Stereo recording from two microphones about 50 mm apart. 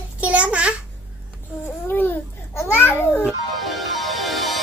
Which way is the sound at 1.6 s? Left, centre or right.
Left.